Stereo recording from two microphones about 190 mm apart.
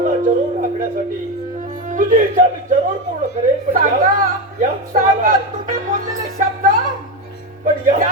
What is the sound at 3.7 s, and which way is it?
Music, 45° right (ahead or behind).